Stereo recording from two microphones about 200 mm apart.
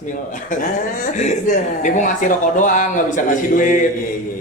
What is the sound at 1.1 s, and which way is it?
A man's voice, 35° left (ahead or behind).